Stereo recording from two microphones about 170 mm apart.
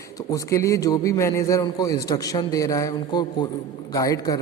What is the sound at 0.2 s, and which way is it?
A woman's voice, 20° left (ahead or behind).